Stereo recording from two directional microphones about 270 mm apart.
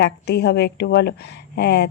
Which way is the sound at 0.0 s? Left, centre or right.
Left.